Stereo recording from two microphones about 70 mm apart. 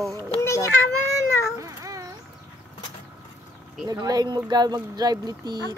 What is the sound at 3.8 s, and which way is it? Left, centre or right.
Speech, right.